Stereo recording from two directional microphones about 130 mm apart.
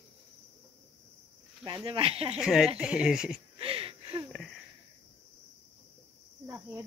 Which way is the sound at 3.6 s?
45° right (ahead or behind).